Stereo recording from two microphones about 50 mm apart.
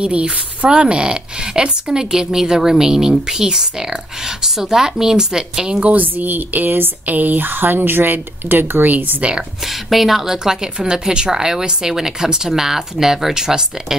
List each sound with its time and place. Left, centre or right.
0.0 s speech: right
5.8 s speech: right
9.7 s speech: centre